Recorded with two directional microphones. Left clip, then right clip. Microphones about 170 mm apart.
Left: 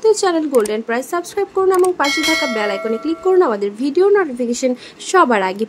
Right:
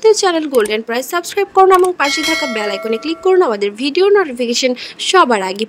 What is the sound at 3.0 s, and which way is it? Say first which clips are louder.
Speech: right 2 dB; 40° right (ahead or behind).